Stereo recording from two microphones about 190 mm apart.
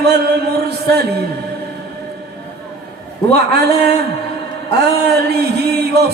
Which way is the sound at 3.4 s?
60° right (ahead or behind).